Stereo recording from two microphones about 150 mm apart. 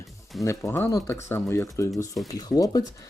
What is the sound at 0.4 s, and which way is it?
Speech, 15° left (ahead or behind).